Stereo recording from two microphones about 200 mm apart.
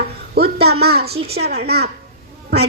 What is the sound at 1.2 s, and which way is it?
Speech, 30° right (ahead or behind).